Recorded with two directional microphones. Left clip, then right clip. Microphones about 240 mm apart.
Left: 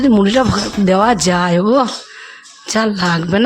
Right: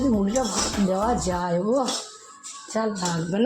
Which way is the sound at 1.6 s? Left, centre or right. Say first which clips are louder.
Left 10 dB; left.